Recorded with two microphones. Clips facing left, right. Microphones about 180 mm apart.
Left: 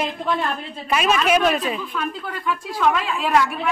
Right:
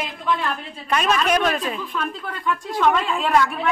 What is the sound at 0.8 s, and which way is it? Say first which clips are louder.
Speech: left 1 dB; 5° left (ahead or behind).